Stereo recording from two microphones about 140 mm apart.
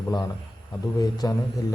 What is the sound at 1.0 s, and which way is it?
Speech, 25° left (ahead or behind).